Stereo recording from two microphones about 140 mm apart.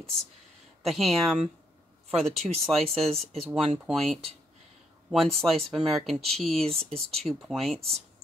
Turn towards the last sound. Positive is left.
turn(degrees=5)  # may be behind; listen again after turning